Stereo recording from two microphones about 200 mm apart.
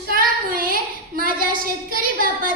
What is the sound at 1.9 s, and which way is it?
Speech, 45° right (ahead or behind).